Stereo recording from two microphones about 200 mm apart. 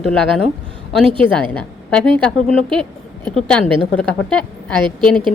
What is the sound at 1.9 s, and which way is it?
A woman's voice, 5° left (ahead or behind).